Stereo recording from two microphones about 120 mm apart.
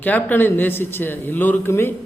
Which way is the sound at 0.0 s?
15° left (ahead or behind).